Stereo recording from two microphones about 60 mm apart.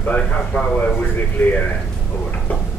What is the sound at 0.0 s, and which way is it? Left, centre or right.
Speech, left.